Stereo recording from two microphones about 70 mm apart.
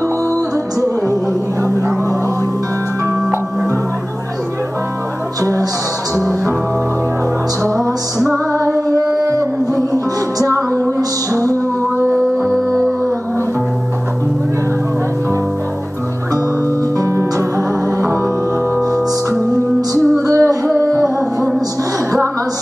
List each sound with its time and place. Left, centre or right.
5.4 s music: right
8.9 s a sound: right
9.9 s music: right
17.0 s music: right
20.2 s music: right